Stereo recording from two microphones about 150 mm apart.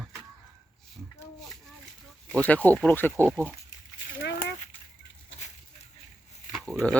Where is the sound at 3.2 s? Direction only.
Centre (ahead or behind).